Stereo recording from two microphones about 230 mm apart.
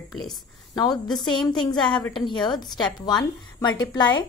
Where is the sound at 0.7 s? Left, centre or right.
Centre.